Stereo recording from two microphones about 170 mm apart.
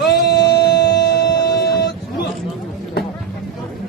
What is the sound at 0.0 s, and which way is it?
Music, 75° left (ahead or behind).